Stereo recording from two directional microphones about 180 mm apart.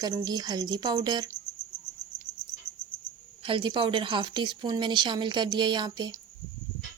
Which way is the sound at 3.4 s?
30° right (ahead or behind).